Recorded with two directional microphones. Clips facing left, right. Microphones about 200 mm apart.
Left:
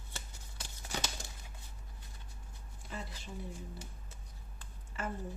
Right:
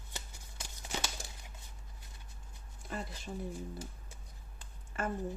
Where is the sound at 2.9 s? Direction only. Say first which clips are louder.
Right 4 dB; 50° right (ahead or behind).